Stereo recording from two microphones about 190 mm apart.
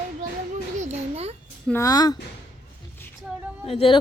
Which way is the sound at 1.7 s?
15° left (ahead or behind).